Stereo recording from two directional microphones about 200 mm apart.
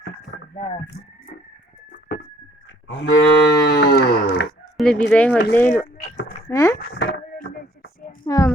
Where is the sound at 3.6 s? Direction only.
55° left (ahead or behind).